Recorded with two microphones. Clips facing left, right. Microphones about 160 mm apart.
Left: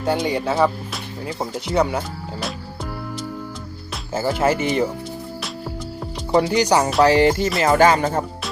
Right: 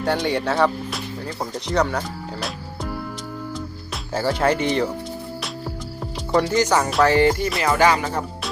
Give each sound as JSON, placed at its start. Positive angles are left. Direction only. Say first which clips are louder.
{"t": 0.0, "sound": "speech", "louder": "left 1 dB", "side_deg": 0}
{"t": 4.1, "sound": "speech", "louder": "left 1 dB", "side_deg": 5}
{"t": 6.3, "sound": "speech", "louder": "left 2 dB", "side_deg": 15}
{"t": 7.6, "sound": "music", "louder": "left 3 dB", "side_deg": 45}